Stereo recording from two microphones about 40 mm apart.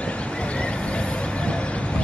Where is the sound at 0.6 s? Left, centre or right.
Left.